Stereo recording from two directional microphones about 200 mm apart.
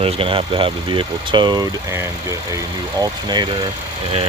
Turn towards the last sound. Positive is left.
turn(degrees=-20)  # may be behind; listen again after turning